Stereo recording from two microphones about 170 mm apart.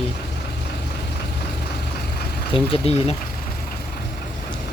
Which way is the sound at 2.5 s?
35° left (ahead or behind).